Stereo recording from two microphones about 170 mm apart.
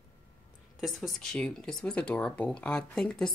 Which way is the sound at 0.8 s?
Centre (ahead or behind).